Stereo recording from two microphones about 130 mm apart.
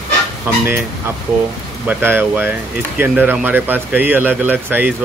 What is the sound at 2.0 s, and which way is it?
Speech, 15° right (ahead or behind).